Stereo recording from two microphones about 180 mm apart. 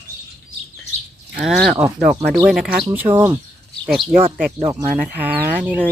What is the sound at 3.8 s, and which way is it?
Speech, centre (ahead or behind).